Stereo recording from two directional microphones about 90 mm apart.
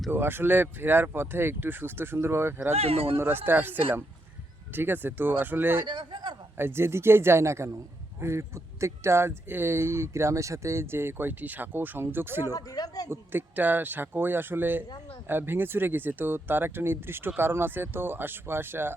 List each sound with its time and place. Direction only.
0.1 s speech: 25° right (ahead or behind)
2.8 s speech: 90° right
3.2 s speech: 25° right (ahead or behind)
5.8 s a man's voice: 65° right (ahead or behind)
6.6 s speech: 25° right (ahead or behind)
12.5 s speech: 45° left (ahead or behind)
13.1 s speech: 20° right (ahead or behind)